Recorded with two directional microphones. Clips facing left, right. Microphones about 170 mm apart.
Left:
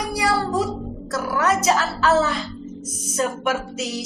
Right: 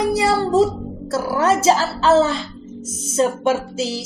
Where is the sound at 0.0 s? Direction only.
25° right (ahead or behind).